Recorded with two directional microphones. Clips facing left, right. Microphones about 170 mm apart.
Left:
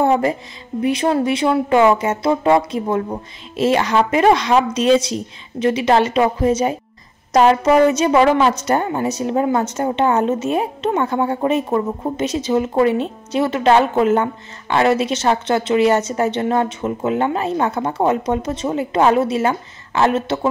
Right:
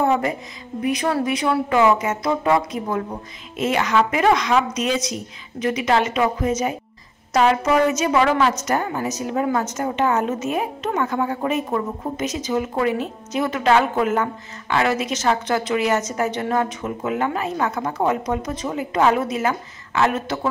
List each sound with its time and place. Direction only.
0.0 s a woman's voice: 30° left (ahead or behind)